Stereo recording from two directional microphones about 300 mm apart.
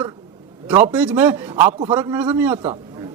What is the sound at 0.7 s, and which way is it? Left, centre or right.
A man's voice, centre.